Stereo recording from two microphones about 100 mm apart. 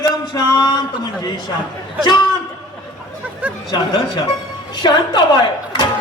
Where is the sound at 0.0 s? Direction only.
45° left (ahead or behind).